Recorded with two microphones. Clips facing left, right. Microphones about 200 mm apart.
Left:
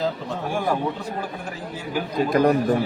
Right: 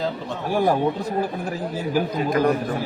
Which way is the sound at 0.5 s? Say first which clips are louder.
Right 5 dB; 40° right (ahead or behind).